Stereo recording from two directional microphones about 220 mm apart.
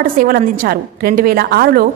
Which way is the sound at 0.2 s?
40° right (ahead or behind).